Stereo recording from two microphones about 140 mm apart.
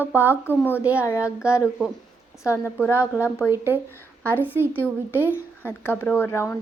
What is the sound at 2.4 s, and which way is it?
Speech, 20° left (ahead or behind).